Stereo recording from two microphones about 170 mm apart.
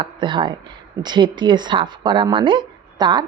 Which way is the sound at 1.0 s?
25° right (ahead or behind).